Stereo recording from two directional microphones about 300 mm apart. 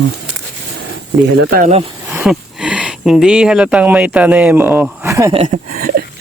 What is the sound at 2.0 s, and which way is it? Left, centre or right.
Speech, centre.